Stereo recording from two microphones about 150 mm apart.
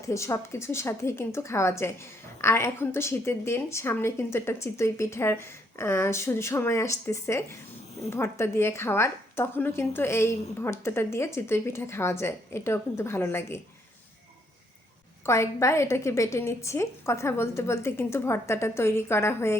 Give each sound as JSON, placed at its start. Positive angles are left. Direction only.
{"t": 0.0, "sound": "a woman's voice", "side_deg": 20}
{"t": 15.3, "sound": "a woman's voice", "side_deg": 20}